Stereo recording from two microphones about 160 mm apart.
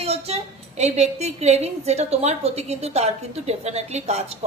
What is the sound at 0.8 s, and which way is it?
A woman's voice, 45° right (ahead or behind).